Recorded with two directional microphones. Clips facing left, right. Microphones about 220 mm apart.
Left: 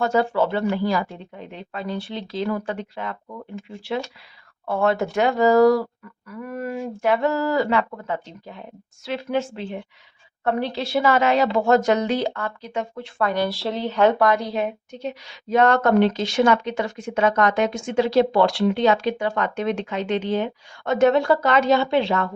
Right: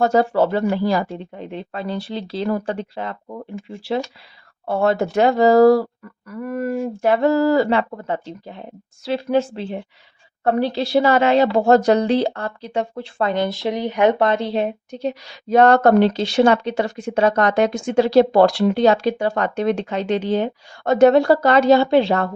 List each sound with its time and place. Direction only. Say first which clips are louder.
0.0 s a woman's voice: right 4 dB; 40° right (ahead or behind)
4.6 s a woman's voice: right 3 dB; 35° right (ahead or behind)
6.2 s speech: right 5 dB; 45° right (ahead or behind)
7.1 s a woman's voice: right 5 dB; 30° right (ahead or behind)